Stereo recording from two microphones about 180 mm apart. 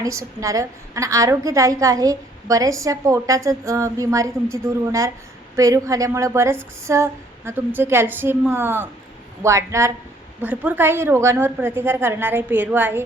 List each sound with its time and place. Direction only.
0.0 s a woman's voice: 15° right (ahead or behind)